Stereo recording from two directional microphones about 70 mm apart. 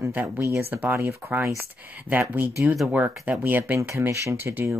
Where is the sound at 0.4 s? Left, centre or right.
Right.